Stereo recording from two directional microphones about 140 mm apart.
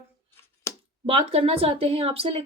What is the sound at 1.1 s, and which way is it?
Speech, 40° right (ahead or behind).